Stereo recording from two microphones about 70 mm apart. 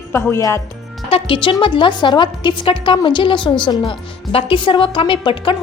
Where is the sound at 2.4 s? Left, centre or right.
Left.